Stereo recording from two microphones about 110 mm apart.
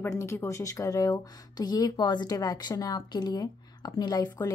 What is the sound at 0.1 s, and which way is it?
Speech, 25° left (ahead or behind).